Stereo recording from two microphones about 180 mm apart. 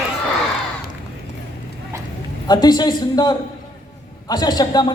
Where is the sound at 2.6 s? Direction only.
25° left (ahead or behind).